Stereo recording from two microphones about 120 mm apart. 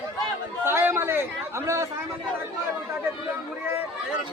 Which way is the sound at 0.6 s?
20° right (ahead or behind).